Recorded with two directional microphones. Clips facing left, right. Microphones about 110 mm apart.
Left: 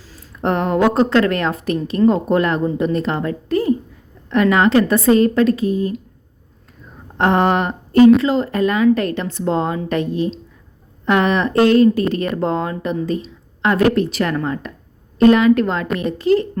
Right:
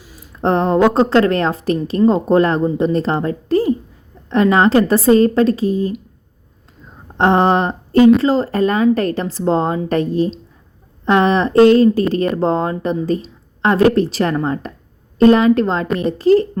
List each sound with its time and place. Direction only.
0.0 s a sound: 15° right (ahead or behind)
0.3 s a woman's voice: 30° right (ahead or behind)
7.2 s a woman's voice: 30° right (ahead or behind)